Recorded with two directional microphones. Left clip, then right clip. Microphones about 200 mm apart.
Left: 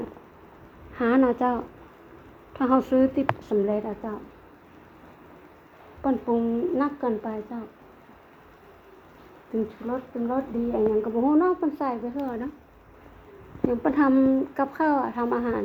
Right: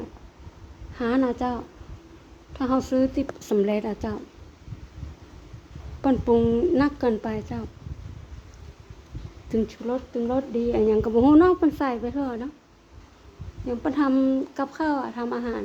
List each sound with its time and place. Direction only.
0.9 s speech: 10° right (ahead or behind)
3.4 s speech: 45° right (ahead or behind)
6.0 s speech: 50° right (ahead or behind)
9.8 s speech: 55° right (ahead or behind); by 12.4 s 30° right (ahead or behind)
13.7 s speech: 5° right (ahead or behind)